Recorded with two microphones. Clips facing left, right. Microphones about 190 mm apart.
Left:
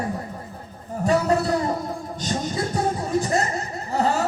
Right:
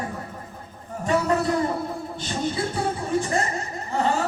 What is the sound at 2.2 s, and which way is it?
Music, 40° left (ahead or behind).